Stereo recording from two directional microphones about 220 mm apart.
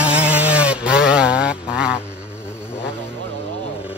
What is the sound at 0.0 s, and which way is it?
Chainsaw, 5° right (ahead or behind).